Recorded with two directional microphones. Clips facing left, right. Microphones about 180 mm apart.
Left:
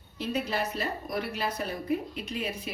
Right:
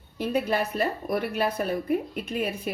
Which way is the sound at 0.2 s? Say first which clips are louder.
Right 5 dB; 55° right (ahead or behind).